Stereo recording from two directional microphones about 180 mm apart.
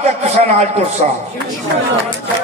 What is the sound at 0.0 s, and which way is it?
A man's voice, 35° right (ahead or behind).